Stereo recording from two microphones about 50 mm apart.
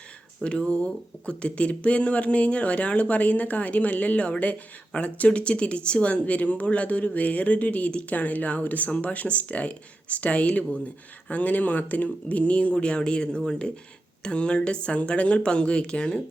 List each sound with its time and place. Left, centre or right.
0.4 s speech: left